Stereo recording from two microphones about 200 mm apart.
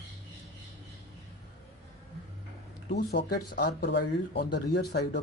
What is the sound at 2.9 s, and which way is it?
Speech, 55° left (ahead or behind).